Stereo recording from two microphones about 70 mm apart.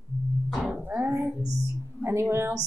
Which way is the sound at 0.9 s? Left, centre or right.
Right.